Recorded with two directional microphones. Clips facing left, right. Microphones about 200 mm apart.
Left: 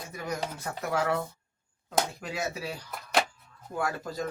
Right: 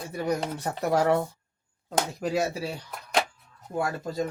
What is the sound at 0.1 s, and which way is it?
Chopping, 35° right (ahead or behind).